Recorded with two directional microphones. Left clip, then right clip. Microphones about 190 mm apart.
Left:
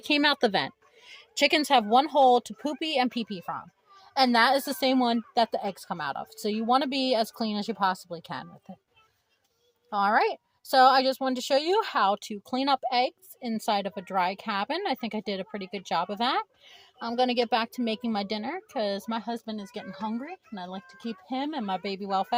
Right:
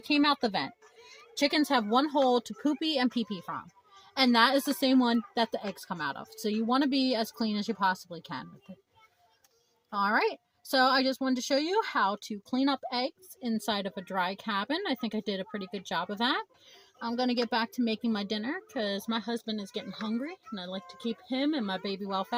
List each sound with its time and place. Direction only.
0.2 s a woman's voice: 45° left (ahead or behind)
1.5 s a woman's voice: 30° left (ahead or behind)
3.2 s speech: 70° left (ahead or behind)
3.4 s a woman's voice: 30° left (ahead or behind)
9.9 s a woman's voice: 35° left (ahead or behind)